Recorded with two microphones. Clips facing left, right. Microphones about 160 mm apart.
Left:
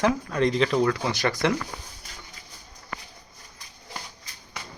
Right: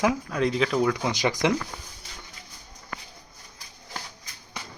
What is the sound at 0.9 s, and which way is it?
Speech, 15° right (ahead or behind).